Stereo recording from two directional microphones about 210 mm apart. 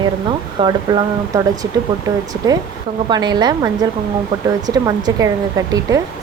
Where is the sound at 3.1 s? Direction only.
20° right (ahead or behind).